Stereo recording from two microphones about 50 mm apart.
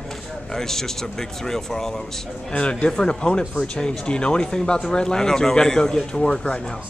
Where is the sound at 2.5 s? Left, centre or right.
Left.